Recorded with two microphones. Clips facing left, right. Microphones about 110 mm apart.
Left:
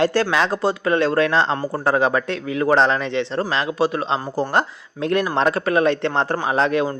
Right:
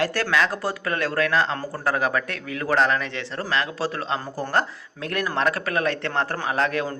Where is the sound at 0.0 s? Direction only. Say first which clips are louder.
Left 4 dB; 25° left (ahead or behind).